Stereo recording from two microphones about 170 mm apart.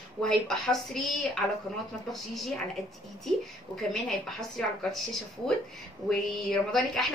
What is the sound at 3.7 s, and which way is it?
Speech, centre (ahead or behind).